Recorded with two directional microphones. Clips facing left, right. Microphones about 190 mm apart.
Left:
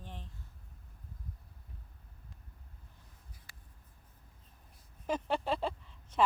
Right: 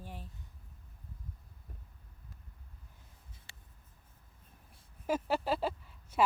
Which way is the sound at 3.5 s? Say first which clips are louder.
Right 1 dB; 25° right (ahead or behind).